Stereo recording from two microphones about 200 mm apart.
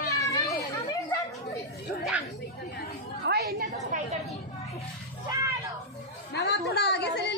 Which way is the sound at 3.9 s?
40° right (ahead or behind).